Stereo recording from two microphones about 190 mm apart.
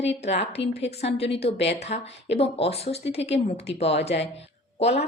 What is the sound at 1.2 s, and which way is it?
Speech, 30° left (ahead or behind).